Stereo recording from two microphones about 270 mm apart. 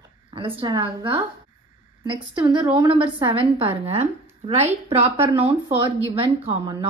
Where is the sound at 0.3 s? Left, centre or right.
Centre.